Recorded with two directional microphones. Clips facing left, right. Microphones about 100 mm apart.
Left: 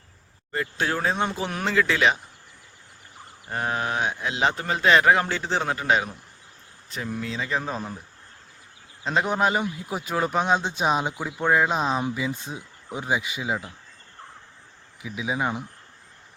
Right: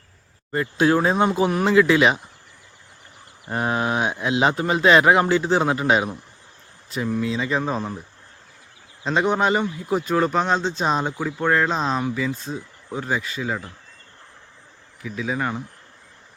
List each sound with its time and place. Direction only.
0.5 s speech: 20° right (ahead or behind)
3.5 s speech: 20° right (ahead or behind)
6.9 s speech: 5° right (ahead or behind)
9.0 s speech: 5° left (ahead or behind)
15.0 s speech: 10° left (ahead or behind)